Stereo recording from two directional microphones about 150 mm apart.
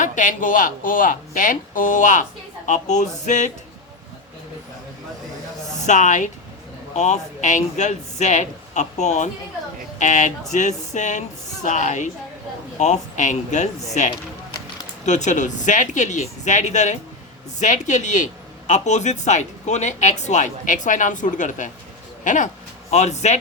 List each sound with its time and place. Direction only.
0.0 s speech: 60° left (ahead or behind)
5.8 s speech: 55° left (ahead or behind)